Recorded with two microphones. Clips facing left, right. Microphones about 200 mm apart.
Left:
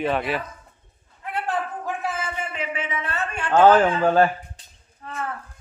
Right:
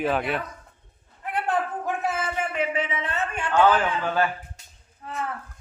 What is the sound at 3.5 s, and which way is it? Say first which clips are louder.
Speech: left 5 dB; 40° left (ahead or behind).